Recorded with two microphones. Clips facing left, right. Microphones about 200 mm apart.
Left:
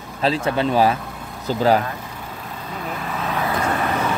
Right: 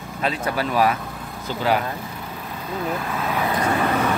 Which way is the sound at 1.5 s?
40° left (ahead or behind).